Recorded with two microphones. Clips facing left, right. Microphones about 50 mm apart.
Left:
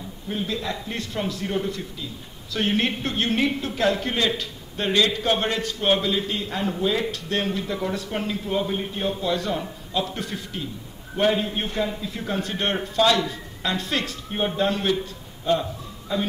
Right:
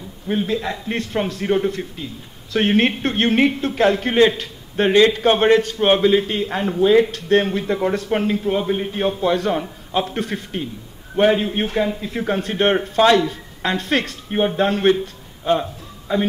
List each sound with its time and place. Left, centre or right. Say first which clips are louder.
0.3 s a man's voice: right 6 dB; right
8.5 s a man's voice: right 4 dB; right
8.9 s a man's voice: right 7 dB; right
16.1 s a man's voice: right 6 dB; right